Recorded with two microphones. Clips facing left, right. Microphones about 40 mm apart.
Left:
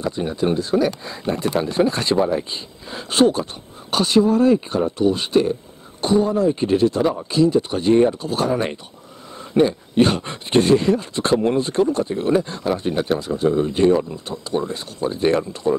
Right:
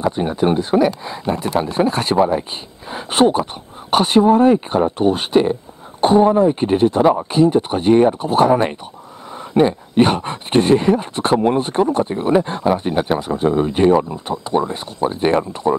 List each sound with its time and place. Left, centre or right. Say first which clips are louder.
0.1 s speech: right 4 dB; right
2.1 s speech: right 5 dB; centre
2.9 s speech: right 2 dB; right
9.5 s speech: right 2 dB; right
13.5 s speech: right 2 dB; right
14.1 s speech: right 5 dB; right
15.7 s speech: right 2 dB; right